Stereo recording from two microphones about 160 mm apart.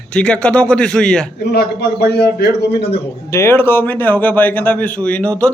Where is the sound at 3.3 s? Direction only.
15° left (ahead or behind).